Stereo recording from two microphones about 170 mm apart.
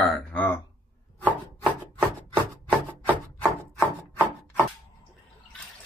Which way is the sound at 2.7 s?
10° right (ahead or behind).